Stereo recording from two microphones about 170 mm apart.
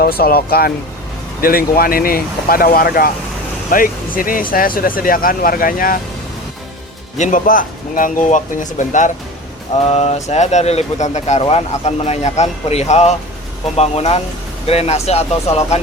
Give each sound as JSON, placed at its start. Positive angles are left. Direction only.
{"t": 0.0, "sound": "speech", "side_deg": 60}
{"t": 7.2, "sound": "speech", "side_deg": 50}
{"t": 9.9, "sound": "speech", "side_deg": 35}